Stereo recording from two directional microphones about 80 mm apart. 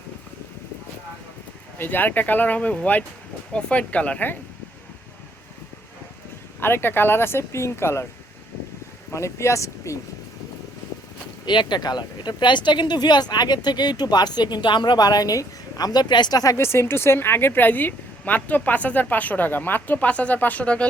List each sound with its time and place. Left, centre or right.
1.8 s speech: left
6.6 s speech: left
9.1 s speech: left
11.4 s speech: left
16.6 s speech: left; by 20.8 s centre